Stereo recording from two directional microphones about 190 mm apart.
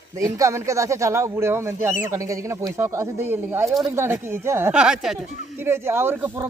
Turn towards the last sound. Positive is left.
turn(degrees=-10)  # may be behind; listen again after turning